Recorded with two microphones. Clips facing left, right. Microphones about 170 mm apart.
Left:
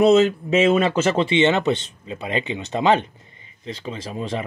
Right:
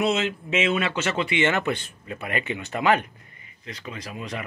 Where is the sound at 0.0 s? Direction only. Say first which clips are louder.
Left 10 dB; 40° left (ahead or behind).